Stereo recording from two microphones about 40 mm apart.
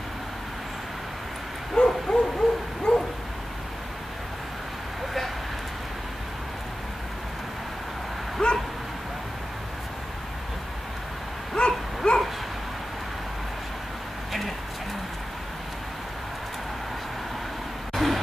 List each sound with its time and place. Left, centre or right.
1.8 s bow-wow: left
8.4 s dog: centre
11.5 s a sound: left
17.9 s vehicle: centre